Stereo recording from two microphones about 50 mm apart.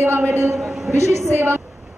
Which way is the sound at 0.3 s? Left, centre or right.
Right.